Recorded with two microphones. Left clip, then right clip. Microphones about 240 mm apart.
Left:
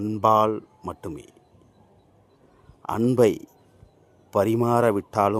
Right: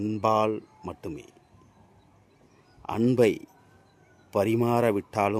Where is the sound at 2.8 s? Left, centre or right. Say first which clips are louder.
Left 3 dB; centre.